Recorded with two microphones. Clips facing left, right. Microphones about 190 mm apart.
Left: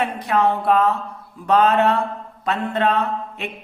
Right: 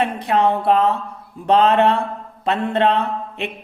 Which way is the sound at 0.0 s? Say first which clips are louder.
Right 2 dB; 25° right (ahead or behind).